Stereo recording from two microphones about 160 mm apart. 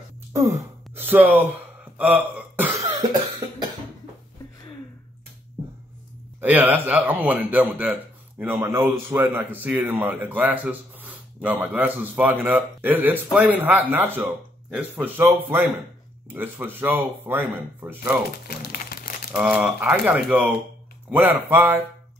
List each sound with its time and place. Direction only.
0.9 s a man's voice: 10° right (ahead or behind)
2.0 s a sound: 10° right (ahead or behind)
3.0 s cough: 25° right (ahead or behind)
6.4 s a man's voice: 10° right (ahead or behind)
18.7 s crumpling: 60° left (ahead or behind)
19.3 s a man's voice: 5° right (ahead or behind)